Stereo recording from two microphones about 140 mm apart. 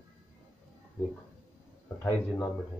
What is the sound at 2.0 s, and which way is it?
Speech, 15° left (ahead or behind).